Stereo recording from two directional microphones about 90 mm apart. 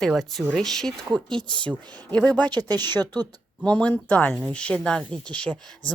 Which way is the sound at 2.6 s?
45° right (ahead or behind).